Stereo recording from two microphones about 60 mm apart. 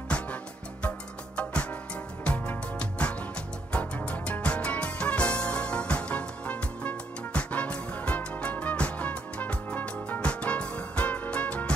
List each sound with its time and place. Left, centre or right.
0.1 s music: centre